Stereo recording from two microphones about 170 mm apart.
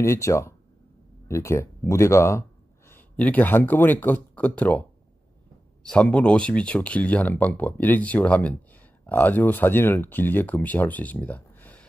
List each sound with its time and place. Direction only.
0.0 s speech: 15° left (ahead or behind)
5.9 s speech: 5° left (ahead or behind)